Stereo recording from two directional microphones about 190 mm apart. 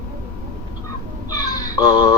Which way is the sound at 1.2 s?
20° left (ahead or behind).